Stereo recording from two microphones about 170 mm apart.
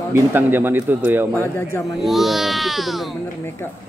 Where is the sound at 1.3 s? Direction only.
10° left (ahead or behind).